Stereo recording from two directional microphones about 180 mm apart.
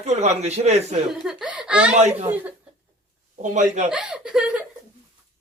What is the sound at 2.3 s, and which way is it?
Speech, 10° right (ahead or behind).